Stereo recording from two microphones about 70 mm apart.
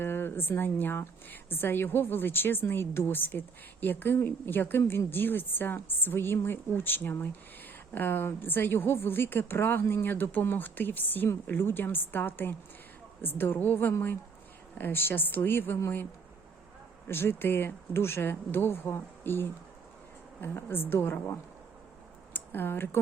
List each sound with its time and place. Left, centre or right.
0.0 s a woman's voice: left
17.1 s a woman's voice: left